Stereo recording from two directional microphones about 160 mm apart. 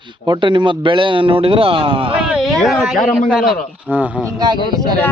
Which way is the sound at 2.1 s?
5° right (ahead or behind).